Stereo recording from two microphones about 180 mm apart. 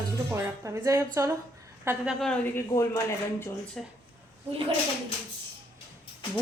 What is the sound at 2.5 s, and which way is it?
Speech, 15° left (ahead or behind).